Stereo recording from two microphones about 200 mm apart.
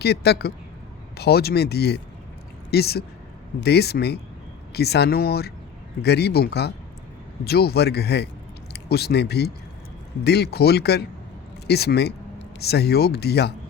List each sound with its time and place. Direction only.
0.0 s a man's voice: 55° left (ahead or behind)